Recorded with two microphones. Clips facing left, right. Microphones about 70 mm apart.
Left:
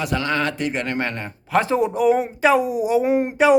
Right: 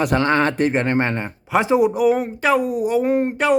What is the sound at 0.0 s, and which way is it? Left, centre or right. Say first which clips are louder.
Speech: right 5 dB; right.